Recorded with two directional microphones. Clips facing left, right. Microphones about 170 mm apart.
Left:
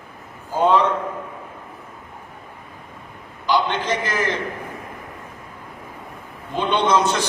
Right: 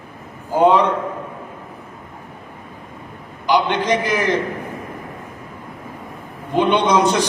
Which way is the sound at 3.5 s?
15° right (ahead or behind).